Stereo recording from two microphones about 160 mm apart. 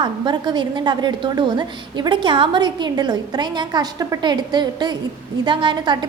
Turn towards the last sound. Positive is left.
turn(degrees=-30)  # may be behind; listen again after turning